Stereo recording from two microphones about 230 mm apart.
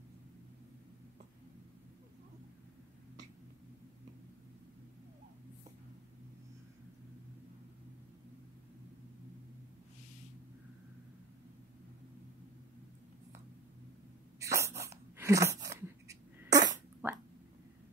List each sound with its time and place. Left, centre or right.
14.4 s sneeze: centre
16.4 s fart: centre